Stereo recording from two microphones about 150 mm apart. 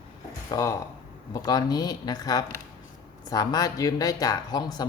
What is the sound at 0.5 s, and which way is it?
Speech, 20° left (ahead or behind).